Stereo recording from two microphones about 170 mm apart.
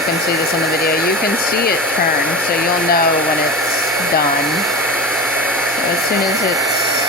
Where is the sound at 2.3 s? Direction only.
5° left (ahead or behind).